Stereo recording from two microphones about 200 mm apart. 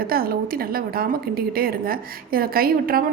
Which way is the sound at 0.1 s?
50° right (ahead or behind).